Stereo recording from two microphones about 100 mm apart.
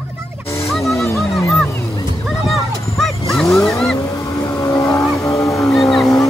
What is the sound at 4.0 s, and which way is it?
Vehicle, 30° left (ahead or behind).